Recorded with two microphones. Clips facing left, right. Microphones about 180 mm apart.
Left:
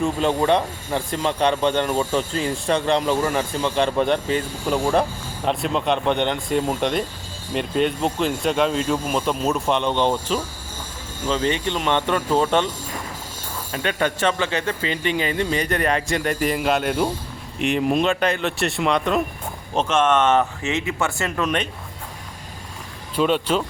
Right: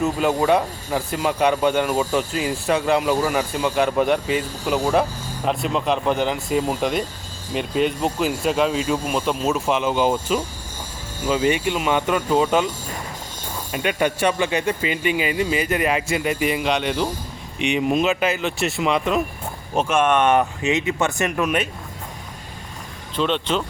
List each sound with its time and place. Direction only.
0.0 s speech: 5° right (ahead or behind)
23.1 s speech: 10° left (ahead or behind)